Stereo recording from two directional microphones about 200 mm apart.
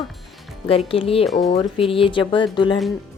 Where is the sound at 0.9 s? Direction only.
30° left (ahead or behind).